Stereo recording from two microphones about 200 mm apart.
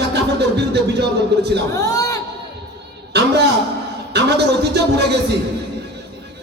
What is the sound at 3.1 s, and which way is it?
A man's voice, 55° right (ahead or behind).